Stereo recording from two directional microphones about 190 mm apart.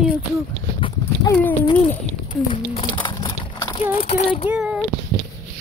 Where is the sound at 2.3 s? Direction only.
25° left (ahead or behind).